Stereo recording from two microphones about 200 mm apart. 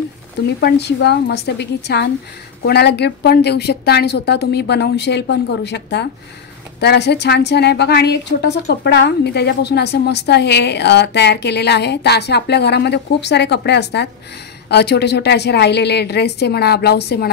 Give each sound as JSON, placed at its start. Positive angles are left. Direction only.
{"t": 0.6, "sound": "a woman's voice", "side_deg": 55}